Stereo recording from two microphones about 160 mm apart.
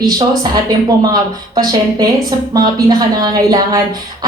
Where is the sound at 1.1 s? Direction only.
25° right (ahead or behind).